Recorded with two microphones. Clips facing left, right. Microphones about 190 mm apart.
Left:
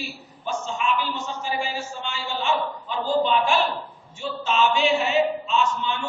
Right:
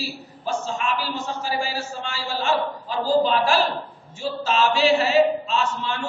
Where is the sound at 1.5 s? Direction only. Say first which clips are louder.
Even; 5° right (ahead or behind).